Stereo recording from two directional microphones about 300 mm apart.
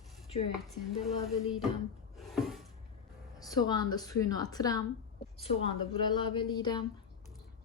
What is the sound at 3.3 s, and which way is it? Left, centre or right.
A woman's voice, centre.